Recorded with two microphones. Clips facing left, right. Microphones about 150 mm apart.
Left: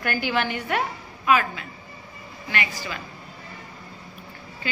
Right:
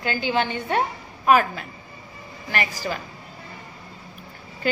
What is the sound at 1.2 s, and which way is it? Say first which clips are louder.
A woman's voice: right 3 dB; 45° right (ahead or behind).